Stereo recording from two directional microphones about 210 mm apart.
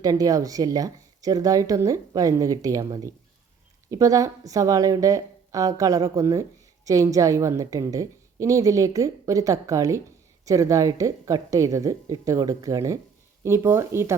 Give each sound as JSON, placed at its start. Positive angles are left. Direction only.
{"t": 0.0, "sound": "a woman's voice", "side_deg": -15}